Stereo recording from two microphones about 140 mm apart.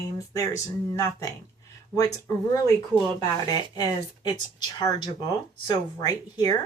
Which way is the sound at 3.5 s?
25° left (ahead or behind).